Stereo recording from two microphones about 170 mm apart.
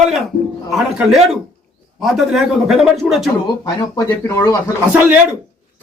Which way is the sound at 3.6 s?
20° left (ahead or behind).